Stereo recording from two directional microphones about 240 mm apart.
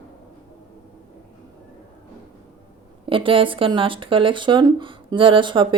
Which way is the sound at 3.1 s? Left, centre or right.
Right.